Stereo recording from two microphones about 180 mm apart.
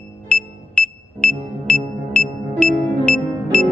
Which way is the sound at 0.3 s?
5° left (ahead or behind).